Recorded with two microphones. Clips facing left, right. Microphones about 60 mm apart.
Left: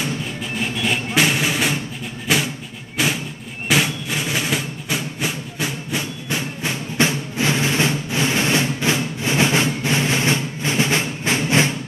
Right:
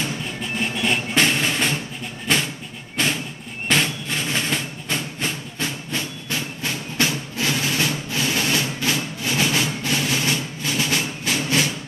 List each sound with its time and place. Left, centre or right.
0.4 s music: centre; by 11.7 s left